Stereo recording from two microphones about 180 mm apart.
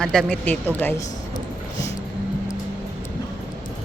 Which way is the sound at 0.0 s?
5° left (ahead or behind).